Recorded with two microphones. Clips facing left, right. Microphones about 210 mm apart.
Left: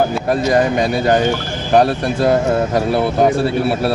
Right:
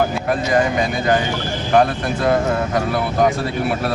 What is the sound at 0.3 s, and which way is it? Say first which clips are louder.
A man's voice: left 4 dB; 35° left (ahead or behind).